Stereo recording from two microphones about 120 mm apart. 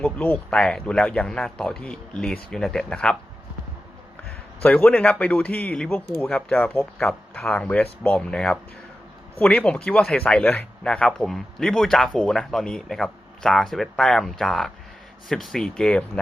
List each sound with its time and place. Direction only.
0.0 s speech: 15° left (ahead or behind)
4.6 s speech: 10° left (ahead or behind)